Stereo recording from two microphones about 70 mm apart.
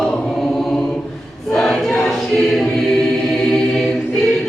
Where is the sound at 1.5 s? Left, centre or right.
Centre.